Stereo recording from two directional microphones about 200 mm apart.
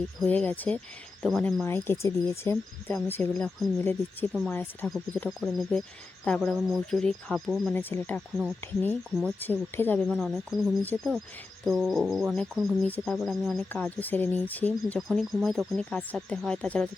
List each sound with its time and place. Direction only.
0.2 s speech: 5° left (ahead or behind)
10.1 s speech: centre (ahead or behind)